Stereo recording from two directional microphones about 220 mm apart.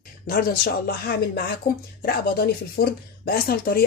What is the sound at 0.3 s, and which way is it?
Speech, 45° left (ahead or behind).